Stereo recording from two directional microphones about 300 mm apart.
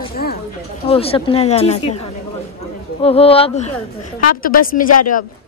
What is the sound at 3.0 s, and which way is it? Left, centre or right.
Speech, centre.